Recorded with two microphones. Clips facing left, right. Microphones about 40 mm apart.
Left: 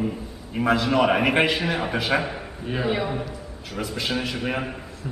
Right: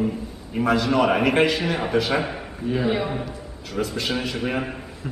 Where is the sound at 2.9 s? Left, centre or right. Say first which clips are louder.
Right 1 dB; centre.